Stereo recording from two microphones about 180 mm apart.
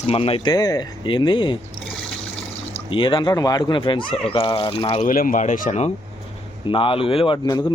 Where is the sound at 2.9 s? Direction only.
25° left (ahead or behind).